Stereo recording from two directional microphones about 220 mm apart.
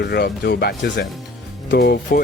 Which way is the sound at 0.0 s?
45° left (ahead or behind).